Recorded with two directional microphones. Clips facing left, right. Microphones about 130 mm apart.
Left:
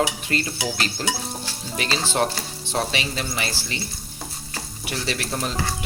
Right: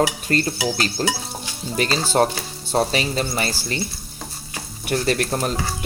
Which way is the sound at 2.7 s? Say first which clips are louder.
Right 5 dB; 40° right (ahead or behind).